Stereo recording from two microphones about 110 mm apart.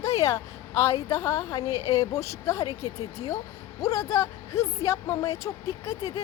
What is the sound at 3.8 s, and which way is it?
Speech, 30° left (ahead or behind).